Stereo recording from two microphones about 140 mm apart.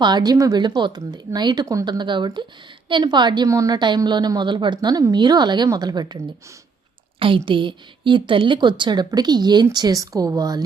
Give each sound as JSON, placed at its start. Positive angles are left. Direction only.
{"t": 0.0, "sound": "a woman's voice", "side_deg": -30}
{"t": 7.2, "sound": "a woman's voice", "side_deg": -40}